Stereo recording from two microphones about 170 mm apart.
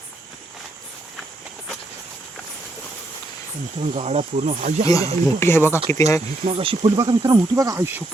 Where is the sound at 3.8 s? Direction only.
35° right (ahead or behind).